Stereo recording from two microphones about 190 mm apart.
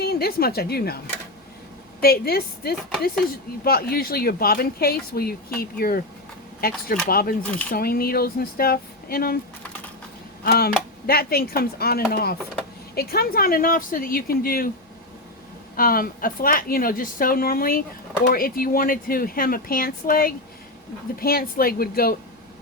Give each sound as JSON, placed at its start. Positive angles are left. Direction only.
{"t": 0.0, "sound": "speech", "side_deg": 55}
{"t": 10.4, "sound": "speech", "side_deg": 55}
{"t": 15.7, "sound": "speech", "side_deg": 50}